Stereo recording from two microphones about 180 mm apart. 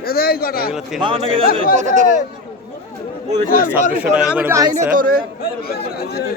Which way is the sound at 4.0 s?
10° right (ahead or behind).